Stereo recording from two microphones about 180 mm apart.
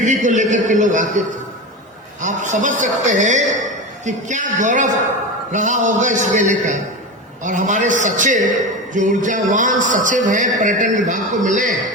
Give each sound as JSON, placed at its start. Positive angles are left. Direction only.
{"t": 0.0, "sound": "a man's voice", "side_deg": -45}
{"t": 2.2, "sound": "a man's voice", "side_deg": -45}